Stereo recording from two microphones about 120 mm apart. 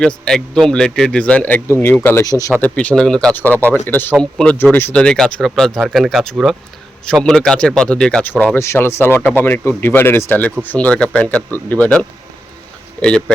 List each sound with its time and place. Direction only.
0.0 s speech: 5° left (ahead or behind)
2.2 s speech: 30° left (ahead or behind)
2.6 s speech: 10° left (ahead or behind)